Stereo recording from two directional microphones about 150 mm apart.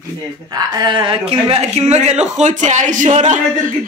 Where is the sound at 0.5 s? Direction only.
30° right (ahead or behind).